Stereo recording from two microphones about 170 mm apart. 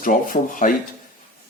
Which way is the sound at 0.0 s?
50° left (ahead or behind).